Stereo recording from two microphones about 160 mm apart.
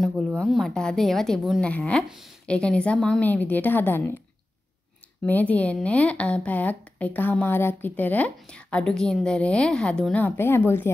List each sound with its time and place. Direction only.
0.1 s speech: 10° right (ahead or behind)
0.4 s a woman's voice: centre (ahead or behind)
5.2 s a woman's voice: 10° left (ahead or behind)